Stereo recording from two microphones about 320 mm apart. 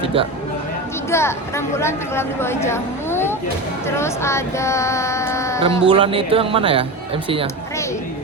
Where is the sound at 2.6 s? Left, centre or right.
Centre.